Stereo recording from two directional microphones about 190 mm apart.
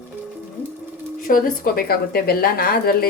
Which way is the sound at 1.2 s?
50° left (ahead or behind).